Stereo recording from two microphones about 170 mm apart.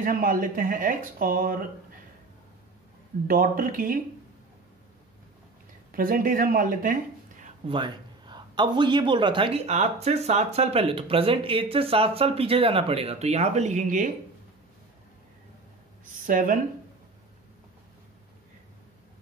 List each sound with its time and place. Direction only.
0.0 s speech: 55° right (ahead or behind)
3.3 s speech: 55° right (ahead or behind)
5.9 s speech: 55° right (ahead or behind)
7.6 s a man's voice: 30° right (ahead or behind); by 14.1 s 50° right (ahead or behind)
16.3 s speech: 50° right (ahead or behind)